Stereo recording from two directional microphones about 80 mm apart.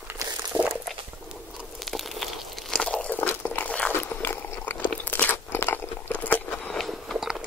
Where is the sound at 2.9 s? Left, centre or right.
Centre.